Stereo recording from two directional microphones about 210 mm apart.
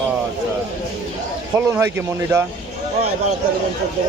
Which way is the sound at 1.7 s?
10° right (ahead or behind).